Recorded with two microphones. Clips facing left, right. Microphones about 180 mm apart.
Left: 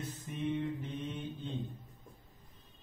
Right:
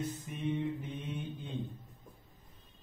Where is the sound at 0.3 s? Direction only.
10° right (ahead or behind).